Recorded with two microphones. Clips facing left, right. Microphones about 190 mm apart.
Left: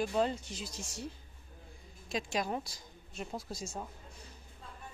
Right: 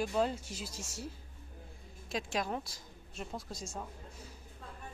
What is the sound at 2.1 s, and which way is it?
A woman's voice, centre (ahead or behind).